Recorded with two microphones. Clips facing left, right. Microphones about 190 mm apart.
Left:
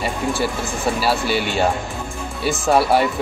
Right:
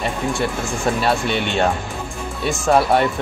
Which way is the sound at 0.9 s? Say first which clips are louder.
Left 1 dB; 5° left (ahead or behind).